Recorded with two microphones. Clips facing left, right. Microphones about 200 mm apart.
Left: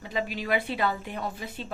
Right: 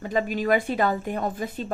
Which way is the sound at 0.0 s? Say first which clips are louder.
Right 7 dB; 45° right (ahead or behind).